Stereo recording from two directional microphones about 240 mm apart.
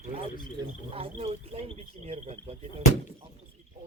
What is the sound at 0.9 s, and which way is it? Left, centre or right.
Speech, right.